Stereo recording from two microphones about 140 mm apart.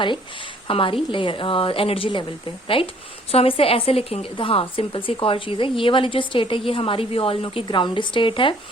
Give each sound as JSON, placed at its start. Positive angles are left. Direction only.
{"t": 0.7, "sound": "a woman's voice", "side_deg": 40}